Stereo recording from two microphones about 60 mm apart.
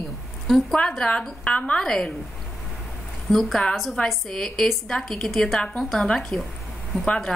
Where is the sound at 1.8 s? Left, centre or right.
Centre.